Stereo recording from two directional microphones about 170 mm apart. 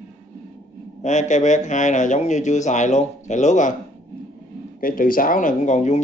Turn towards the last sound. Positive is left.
turn(degrees=45)  # may be behind; listen again after turning